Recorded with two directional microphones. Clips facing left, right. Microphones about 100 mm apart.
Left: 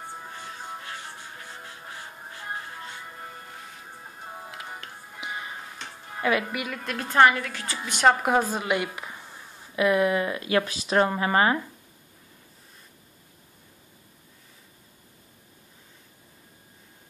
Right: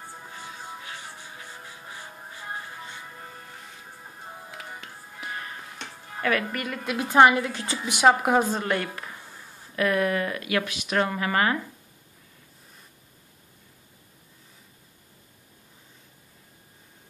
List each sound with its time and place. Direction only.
5.2 s music: 15° left (ahead or behind)
6.5 s a woman's voice: 5° left (ahead or behind); by 7.9 s 20° right (ahead or behind)
7.9 s speech: 5° right (ahead or behind)
8.5 s speech: 10° left (ahead or behind); by 11.5 s 25° left (ahead or behind)